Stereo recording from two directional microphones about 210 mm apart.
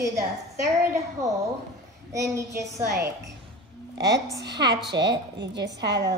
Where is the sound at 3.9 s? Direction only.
55° right (ahead or behind).